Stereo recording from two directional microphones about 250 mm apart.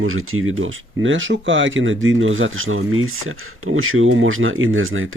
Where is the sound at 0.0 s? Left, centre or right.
Right.